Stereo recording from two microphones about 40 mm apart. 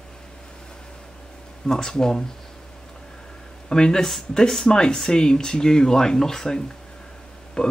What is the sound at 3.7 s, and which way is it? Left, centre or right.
Speech, centre.